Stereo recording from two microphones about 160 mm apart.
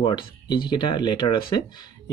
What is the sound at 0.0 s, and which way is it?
Speech, 30° left (ahead or behind).